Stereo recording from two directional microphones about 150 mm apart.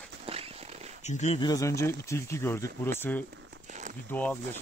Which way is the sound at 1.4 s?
25° left (ahead or behind).